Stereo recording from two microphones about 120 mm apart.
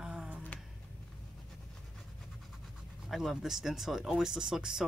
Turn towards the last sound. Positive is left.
turn(degrees=-5)  # may be behind; listen again after turning